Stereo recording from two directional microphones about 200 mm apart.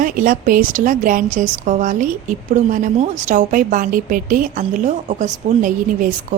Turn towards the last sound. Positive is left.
turn(degrees=-40)  # may be behind; listen again after turning